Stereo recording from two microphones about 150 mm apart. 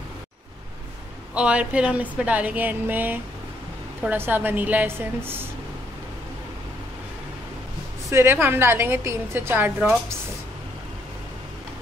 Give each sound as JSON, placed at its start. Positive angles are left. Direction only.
{"t": 1.3, "sound": "a woman's voice", "side_deg": -5}
{"t": 8.1, "sound": "a woman's voice", "side_deg": -15}